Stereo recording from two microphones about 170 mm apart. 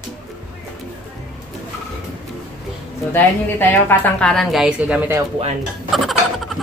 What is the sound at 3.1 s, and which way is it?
A woman's voice, 10° left (ahead or behind).